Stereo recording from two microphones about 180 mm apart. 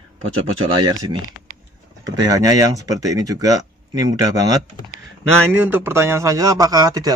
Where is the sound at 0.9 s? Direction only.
20° right (ahead or behind).